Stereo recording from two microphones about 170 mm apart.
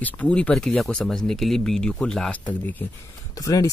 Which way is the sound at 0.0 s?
10° left (ahead or behind).